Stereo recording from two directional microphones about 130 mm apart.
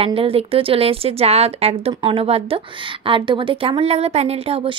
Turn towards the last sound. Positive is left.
turn(degrees=-45)  # may be behind; listen again after turning